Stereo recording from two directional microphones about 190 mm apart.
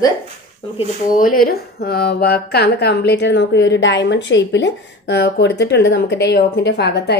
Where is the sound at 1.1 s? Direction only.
45° left (ahead or behind).